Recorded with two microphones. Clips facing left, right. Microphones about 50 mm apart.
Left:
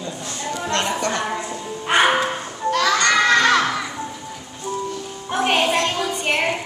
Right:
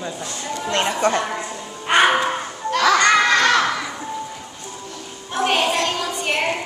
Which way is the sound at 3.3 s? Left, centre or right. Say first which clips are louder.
Even; centre.